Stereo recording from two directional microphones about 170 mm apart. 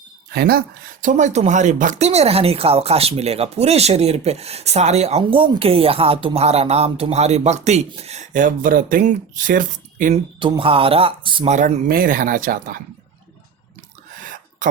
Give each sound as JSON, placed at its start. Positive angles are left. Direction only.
{"t": 0.3, "sound": "speech", "side_deg": -65}
{"t": 1.0, "sound": "speech", "side_deg": -45}
{"t": 10.4, "sound": "speech", "side_deg": -30}
{"t": 11.5, "sound": "speech", "side_deg": -55}